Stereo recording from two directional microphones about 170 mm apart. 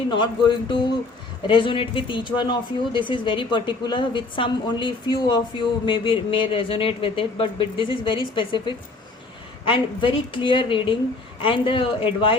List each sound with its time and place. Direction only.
0.1 s a woman's voice: 30° left (ahead or behind)